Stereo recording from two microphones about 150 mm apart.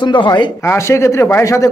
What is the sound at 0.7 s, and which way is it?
Speech, 20° left (ahead or behind).